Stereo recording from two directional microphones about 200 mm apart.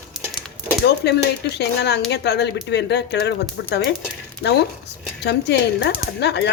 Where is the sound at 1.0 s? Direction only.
55° left (ahead or behind).